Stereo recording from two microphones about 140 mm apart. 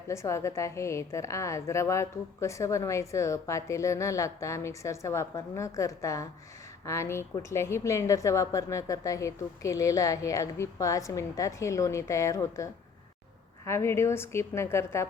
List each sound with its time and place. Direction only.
0.1 s a woman's voice: 20° left (ahead or behind)
13.7 s a woman's voice: 20° left (ahead or behind)